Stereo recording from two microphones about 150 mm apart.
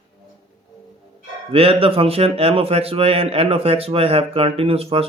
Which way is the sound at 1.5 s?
40° right (ahead or behind).